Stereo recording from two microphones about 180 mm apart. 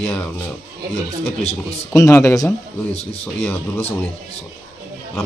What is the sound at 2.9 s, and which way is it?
Speech, 35° left (ahead or behind).